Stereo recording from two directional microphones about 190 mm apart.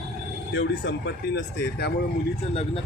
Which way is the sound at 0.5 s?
75° left (ahead or behind).